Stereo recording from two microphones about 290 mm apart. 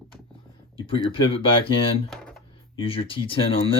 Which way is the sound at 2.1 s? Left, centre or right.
Centre.